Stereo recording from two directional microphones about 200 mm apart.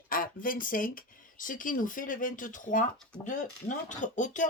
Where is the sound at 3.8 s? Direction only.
40° left (ahead or behind).